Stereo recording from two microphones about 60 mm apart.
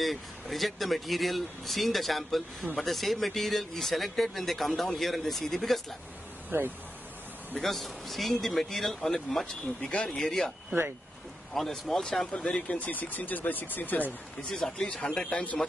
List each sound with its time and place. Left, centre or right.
0.0 s speech: centre
6.5 s speech: right
7.6 s speech: centre
11.5 s speech: centre
12.6 s speech: left
14.5 s speech: centre